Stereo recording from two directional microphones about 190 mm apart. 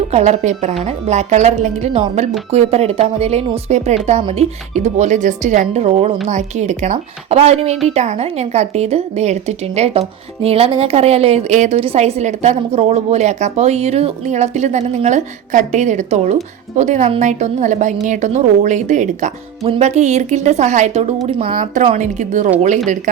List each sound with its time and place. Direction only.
0.1 s a woman's voice: 35° right (ahead or behind)